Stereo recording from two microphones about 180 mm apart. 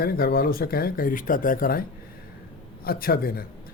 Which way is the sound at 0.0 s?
55° left (ahead or behind).